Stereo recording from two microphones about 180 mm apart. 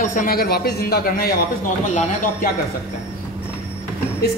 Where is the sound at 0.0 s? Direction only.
50° left (ahead or behind).